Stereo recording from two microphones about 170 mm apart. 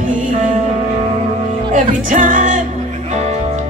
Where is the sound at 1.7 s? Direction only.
45° right (ahead or behind).